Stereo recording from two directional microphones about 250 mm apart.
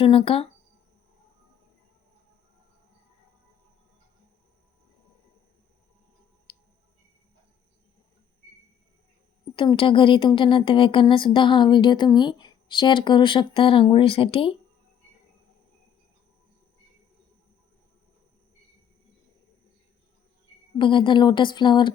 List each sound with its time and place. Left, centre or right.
0.0 s speech: left
6.5 s a sound: left
9.6 s speech: centre
20.7 s speech: centre